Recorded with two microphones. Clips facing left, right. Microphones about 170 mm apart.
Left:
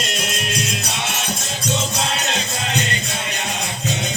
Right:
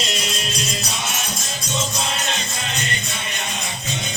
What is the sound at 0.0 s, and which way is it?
Music, 55° left (ahead or behind).